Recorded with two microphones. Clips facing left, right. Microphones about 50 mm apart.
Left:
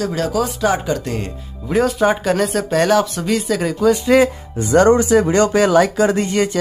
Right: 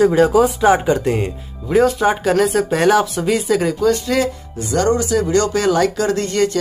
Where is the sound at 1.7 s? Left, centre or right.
Centre.